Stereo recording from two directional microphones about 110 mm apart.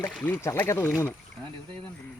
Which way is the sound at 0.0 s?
20° left (ahead or behind).